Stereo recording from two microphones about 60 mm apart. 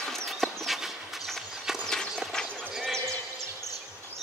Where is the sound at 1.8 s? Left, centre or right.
Centre.